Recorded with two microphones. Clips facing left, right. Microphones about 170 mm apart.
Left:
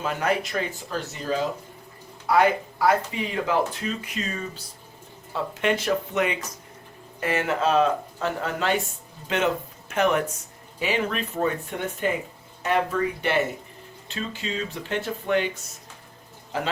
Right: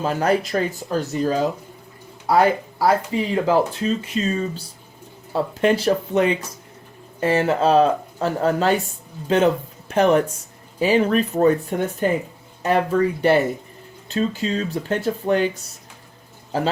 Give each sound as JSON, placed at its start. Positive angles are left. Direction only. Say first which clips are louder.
{"t": 0.0, "sound": "speech", "louder": "right 5 dB", "side_deg": -35}
{"t": 13.2, "sound": "speech", "louder": "right 7 dB", "side_deg": -40}
{"t": 16.5, "sound": "speech", "louder": "right 6 dB", "side_deg": -35}